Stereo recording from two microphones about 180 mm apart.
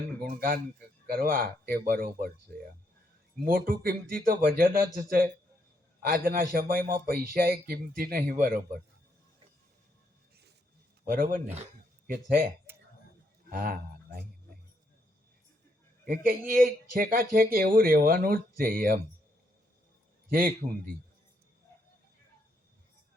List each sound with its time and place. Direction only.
0.3 s speech: 50° right (ahead or behind)
3.4 s speech: 55° right (ahead or behind)
11.0 s speech: 50° right (ahead or behind)
12.0 s speech: 55° right (ahead or behind)
13.5 s speech: 50° right (ahead or behind)
16.0 s speech: 50° right (ahead or behind)
20.6 s a man's voice: 35° right (ahead or behind)